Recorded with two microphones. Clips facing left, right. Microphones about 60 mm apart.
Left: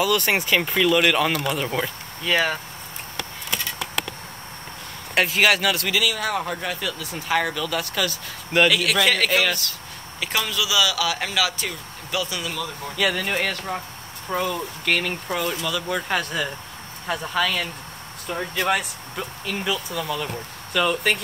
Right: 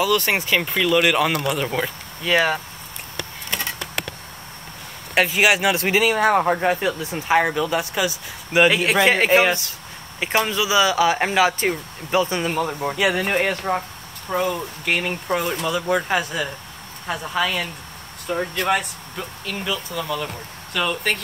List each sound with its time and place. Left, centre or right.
0.0 s speech: centre
5.1 s speech: centre
8.6 s speech: right
12.9 s speech: right
14.4 s speech: centre
18.7 s speech: centre
20.0 s speech: centre